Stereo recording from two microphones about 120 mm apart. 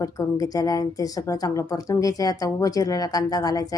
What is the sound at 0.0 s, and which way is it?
A woman's voice, 30° left (ahead or behind).